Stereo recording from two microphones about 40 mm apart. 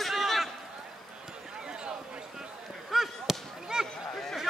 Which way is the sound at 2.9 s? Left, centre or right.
Centre.